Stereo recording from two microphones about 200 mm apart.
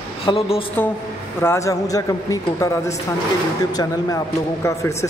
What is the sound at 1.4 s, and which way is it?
Speech, 15° left (ahead or behind).